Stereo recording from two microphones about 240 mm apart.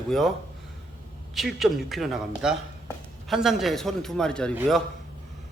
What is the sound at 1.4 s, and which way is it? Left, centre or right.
Speech, centre.